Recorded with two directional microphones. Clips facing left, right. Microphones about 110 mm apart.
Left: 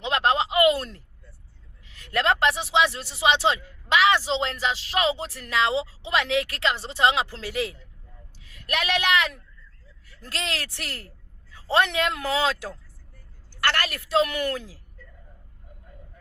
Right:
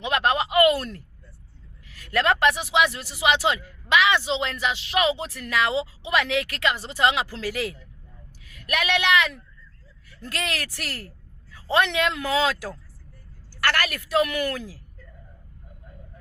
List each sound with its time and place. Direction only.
0.0 s a sound: 30° left (ahead or behind)
1.9 s speech: 25° left (ahead or behind)
10.2 s a woman's voice: 30° left (ahead or behind)
12.2 s a woman's voice: 25° left (ahead or behind)